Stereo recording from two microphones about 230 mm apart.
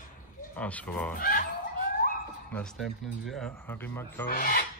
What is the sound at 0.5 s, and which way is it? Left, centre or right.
Speech, centre.